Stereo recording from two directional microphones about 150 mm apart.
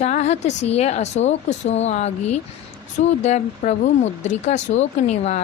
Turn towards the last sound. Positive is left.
turn(degrees=50)  # may be behind; listen again after turning